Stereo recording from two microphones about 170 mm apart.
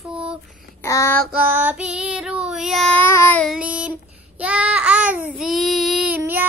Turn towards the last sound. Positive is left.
turn(degrees=-10)  # may be behind; listen again after turning